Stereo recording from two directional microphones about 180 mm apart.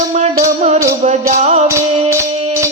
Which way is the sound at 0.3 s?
45° right (ahead or behind).